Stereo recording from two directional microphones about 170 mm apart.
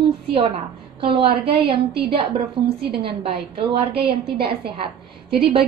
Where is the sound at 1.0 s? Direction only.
30° right (ahead or behind).